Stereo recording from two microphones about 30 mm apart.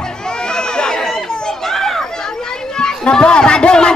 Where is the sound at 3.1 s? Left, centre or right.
Left.